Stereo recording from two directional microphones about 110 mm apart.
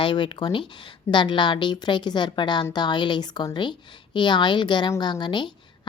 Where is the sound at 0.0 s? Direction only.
45° left (ahead or behind).